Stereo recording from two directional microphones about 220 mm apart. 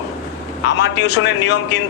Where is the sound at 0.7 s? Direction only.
55° left (ahead or behind).